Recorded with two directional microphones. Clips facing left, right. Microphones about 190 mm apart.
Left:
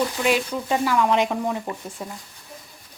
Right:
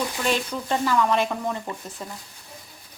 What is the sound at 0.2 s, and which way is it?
Speech, 10° left (ahead or behind).